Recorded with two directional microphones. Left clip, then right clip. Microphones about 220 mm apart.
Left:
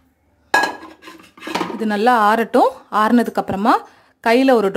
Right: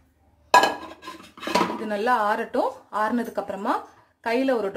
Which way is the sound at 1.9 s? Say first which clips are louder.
Left 10 dB; 50° left (ahead or behind).